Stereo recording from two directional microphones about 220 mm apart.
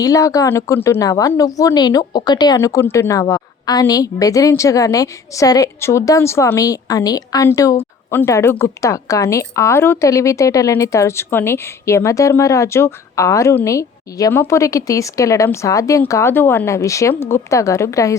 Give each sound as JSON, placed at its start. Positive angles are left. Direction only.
{"t": 0.0, "sound": "a woman's voice", "side_deg": 15}